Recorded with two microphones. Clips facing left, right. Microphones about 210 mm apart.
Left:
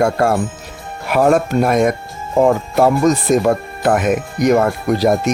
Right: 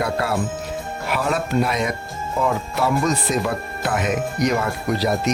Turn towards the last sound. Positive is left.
turn(degrees=50)  # may be behind; listen again after turning